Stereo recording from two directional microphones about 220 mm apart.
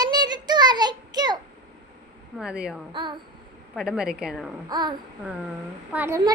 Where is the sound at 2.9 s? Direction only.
20° right (ahead or behind).